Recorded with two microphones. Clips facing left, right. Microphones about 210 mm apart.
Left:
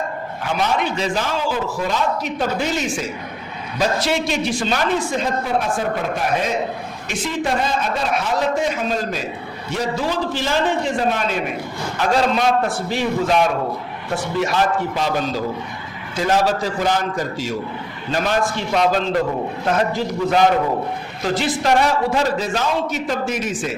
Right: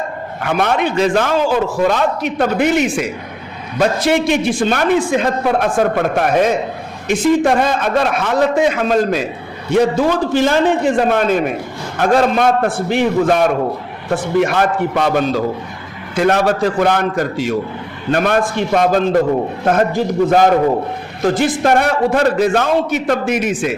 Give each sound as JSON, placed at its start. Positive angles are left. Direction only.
{"t": 0.4, "sound": "a man's voice", "side_deg": -60}
{"t": 9.7, "sound": "a man's voice", "side_deg": -55}